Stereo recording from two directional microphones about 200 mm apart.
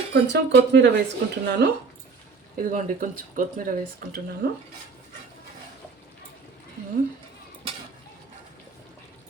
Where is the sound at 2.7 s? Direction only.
45° right (ahead or behind).